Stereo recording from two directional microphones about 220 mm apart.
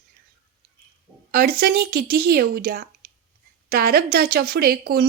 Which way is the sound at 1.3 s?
45° right (ahead or behind).